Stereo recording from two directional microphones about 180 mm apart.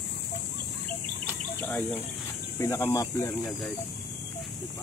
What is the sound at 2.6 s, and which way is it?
Speech, 15° left (ahead or behind).